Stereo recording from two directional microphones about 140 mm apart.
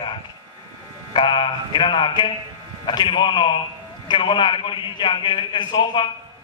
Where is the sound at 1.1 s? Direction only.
35° left (ahead or behind).